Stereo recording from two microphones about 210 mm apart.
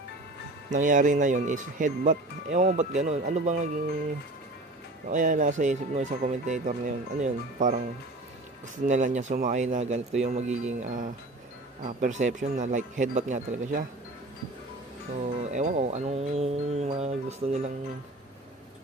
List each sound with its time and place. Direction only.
0.7 s speech: 40° right (ahead or behind)
5.0 s speech: 40° right (ahead or behind)
8.9 s speech: 35° right (ahead or behind)
15.2 s speech: 35° right (ahead or behind)